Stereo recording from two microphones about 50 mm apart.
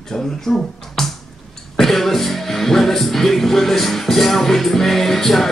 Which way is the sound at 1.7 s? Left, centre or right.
Centre.